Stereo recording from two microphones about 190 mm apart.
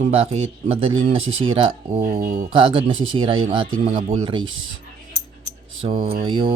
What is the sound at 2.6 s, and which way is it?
Speech, 25° right (ahead or behind).